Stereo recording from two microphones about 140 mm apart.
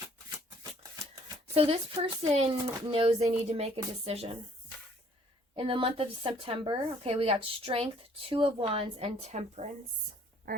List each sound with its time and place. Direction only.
1.5 s speech: 45° right (ahead or behind)
5.5 s a woman's voice: 40° right (ahead or behind)